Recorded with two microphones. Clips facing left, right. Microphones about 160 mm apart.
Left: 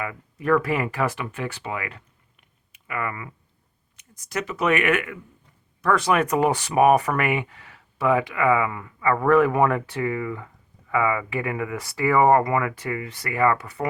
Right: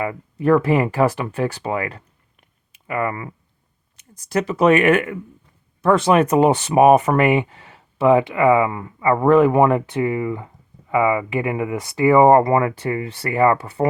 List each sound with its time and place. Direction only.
0.0 s speech: 30° right (ahead or behind)